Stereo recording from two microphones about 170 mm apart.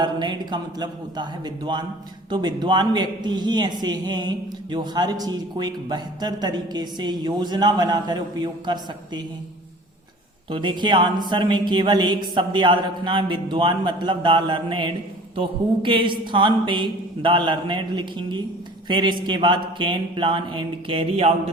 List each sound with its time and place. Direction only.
0.0 s a man's voice: 25° right (ahead or behind)
10.5 s a man's voice: 30° right (ahead or behind)